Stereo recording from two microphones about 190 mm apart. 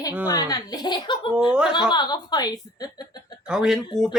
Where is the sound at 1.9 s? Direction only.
20° left (ahead or behind).